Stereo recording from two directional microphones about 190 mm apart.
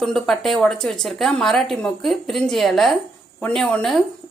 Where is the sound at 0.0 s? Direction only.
Centre (ahead or behind).